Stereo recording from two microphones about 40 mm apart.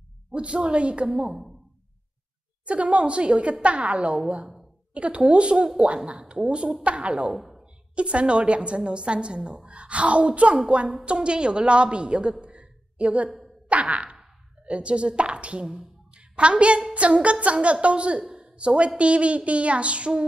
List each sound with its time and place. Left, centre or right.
0.3 s a woman's voice: right
1.1 s a woman's voice: centre
2.6 s a sound: right
4.9 s a woman's voice: right
7.2 s speech: centre
7.9 s a woman's voice: right
13.7 s a sound: right
14.7 s a woman's voice: right
18.4 s a sound: right